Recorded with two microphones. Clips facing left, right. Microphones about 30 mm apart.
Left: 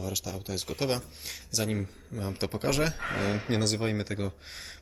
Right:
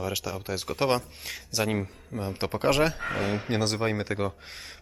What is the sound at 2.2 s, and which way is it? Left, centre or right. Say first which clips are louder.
Speech: right 5 dB; centre.